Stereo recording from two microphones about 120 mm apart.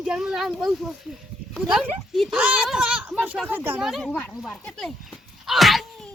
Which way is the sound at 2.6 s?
5° right (ahead or behind).